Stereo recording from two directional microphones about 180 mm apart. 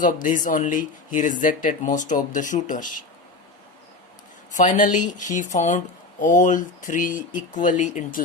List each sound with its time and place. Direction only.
0.0 s speech: 45° left (ahead or behind)
4.5 s speech: 45° left (ahead or behind)